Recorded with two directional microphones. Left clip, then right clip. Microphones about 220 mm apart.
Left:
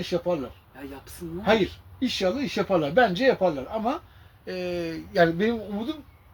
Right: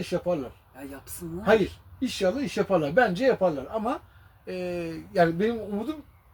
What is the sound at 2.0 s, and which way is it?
A man's voice, 5° left (ahead or behind).